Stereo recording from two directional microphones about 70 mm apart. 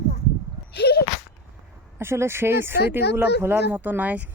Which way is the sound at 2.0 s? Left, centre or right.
Right.